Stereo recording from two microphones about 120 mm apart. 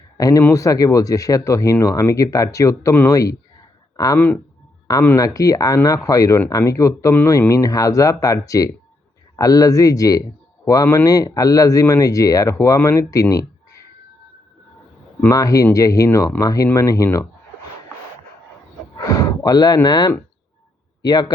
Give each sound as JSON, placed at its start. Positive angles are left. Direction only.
{"t": 0.2, "sound": "speech", "side_deg": 30}
{"t": 15.3, "sound": "speech", "side_deg": 30}
{"t": 18.9, "sound": "a sound", "side_deg": 30}
{"t": 21.0, "sound": "a man's voice", "side_deg": 35}